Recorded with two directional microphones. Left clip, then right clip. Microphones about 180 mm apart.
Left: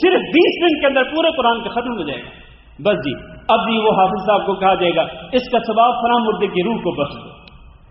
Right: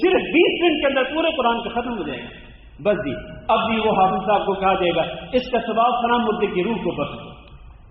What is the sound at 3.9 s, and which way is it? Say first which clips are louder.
A man's voice: left 1 dB; 30° left (ahead or behind).